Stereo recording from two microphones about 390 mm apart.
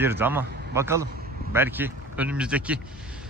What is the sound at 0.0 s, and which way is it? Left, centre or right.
Speech, centre.